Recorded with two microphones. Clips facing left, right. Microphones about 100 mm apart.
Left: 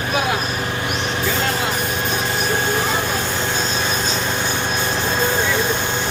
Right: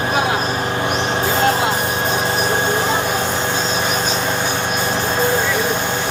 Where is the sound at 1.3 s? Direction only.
35° right (ahead or behind).